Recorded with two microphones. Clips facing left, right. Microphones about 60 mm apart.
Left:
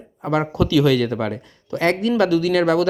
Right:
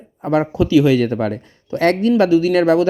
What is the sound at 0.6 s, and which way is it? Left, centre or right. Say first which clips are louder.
Speech: right 3 dB; right.